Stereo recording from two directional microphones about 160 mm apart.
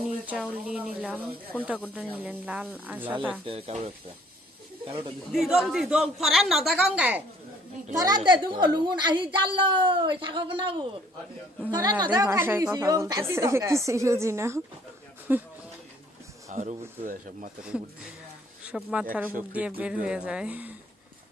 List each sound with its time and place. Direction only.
0.0 s a woman's voice: 5° right (ahead or behind)
3.4 s speech: 40° right (ahead or behind)
5.3 s a woman's voice: centre (ahead or behind)
7.9 s a woman's voice: 25° right (ahead or behind)
16.5 s speech: 50° right (ahead or behind)
18.6 s a woman's voice: 5° right (ahead or behind)